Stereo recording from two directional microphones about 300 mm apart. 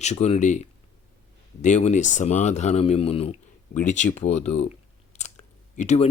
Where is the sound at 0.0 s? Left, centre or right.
Left.